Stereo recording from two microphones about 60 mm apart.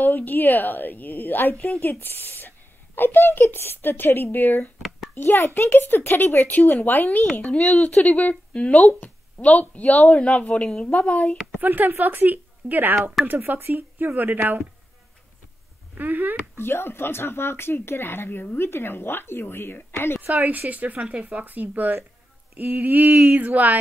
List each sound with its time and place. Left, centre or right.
0.0 s speech: left
11.6 s speech: right
15.9 s speech: right
16.5 s speech: left
20.2 s speech: right